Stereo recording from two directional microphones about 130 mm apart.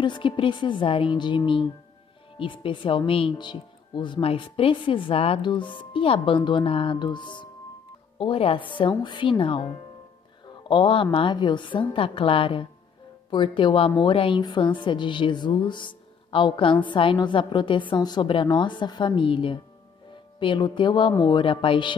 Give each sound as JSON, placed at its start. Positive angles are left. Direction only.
{"t": 0.0, "sound": "speech", "side_deg": 40}
{"t": 10.7, "sound": "a woman's voice", "side_deg": 40}